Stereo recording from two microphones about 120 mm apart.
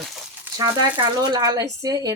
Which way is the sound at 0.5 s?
35° right (ahead or behind).